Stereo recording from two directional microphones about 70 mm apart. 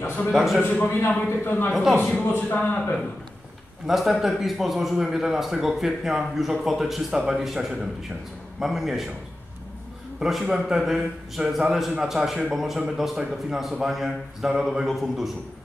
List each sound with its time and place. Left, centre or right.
0.0 s a man's voice: left
0.3 s a man's voice: centre
0.7 s a man's voice: left
1.7 s a man's voice: centre
2.5 s speech: centre
3.8 s a man's voice: centre
10.4 s a man's voice: centre